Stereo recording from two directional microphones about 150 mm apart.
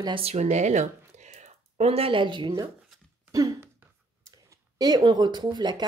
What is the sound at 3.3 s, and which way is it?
Throat clearing, 25° right (ahead or behind).